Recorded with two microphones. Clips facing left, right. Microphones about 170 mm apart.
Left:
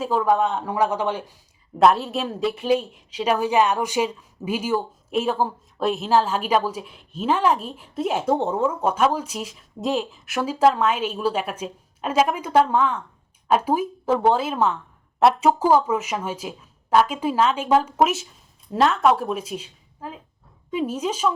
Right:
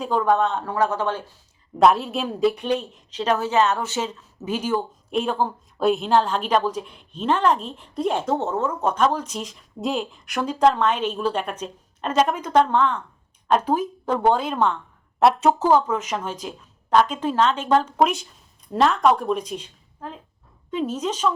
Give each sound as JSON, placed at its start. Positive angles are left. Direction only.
{"t": 0.0, "sound": "speech", "side_deg": 5}
{"t": 1.8, "sound": "a woman's voice", "side_deg": 0}